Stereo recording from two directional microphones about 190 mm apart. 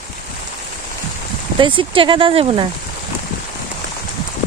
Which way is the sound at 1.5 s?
25° right (ahead or behind).